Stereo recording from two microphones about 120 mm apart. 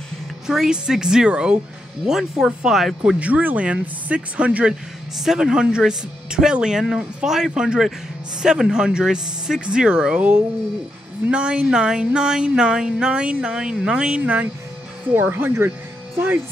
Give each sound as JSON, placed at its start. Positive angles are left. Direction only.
{"t": 0.5, "sound": "speech", "side_deg": -5}